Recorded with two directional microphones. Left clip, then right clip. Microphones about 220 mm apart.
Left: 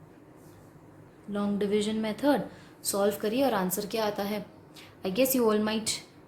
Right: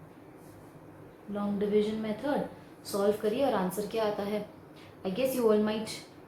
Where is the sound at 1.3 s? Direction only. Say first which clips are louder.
Even; 55° left (ahead or behind).